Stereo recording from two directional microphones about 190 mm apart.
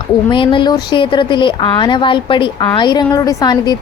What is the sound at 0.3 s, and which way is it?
A woman's voice, 25° left (ahead or behind).